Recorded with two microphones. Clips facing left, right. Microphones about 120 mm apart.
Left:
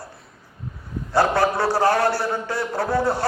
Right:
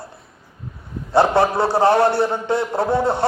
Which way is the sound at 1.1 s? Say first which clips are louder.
Right 4 dB; 25° right (ahead or behind).